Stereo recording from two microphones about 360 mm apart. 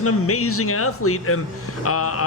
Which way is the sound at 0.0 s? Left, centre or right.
Left.